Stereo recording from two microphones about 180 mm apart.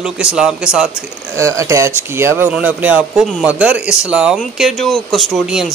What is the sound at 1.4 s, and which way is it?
Speech, 15° right (ahead or behind).